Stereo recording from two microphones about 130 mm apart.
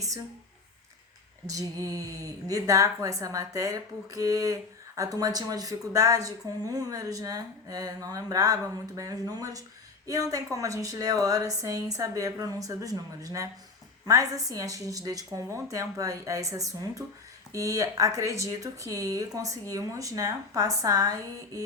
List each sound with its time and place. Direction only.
1.5 s speech: 25° right (ahead or behind)